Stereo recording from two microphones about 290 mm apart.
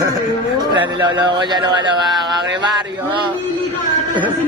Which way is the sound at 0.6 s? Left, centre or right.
Centre.